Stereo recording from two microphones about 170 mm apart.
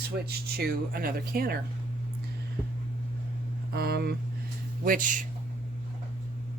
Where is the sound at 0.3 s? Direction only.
65° right (ahead or behind).